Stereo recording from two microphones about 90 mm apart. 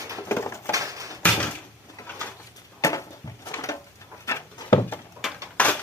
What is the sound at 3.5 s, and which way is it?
Bird, 35° left (ahead or behind).